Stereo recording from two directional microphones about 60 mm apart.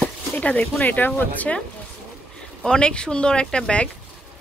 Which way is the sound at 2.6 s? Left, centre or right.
Centre.